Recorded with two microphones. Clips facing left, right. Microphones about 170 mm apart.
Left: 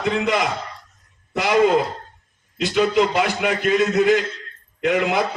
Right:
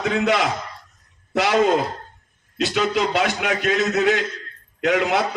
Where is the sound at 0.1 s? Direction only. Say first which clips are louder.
Even; 70° right (ahead or behind).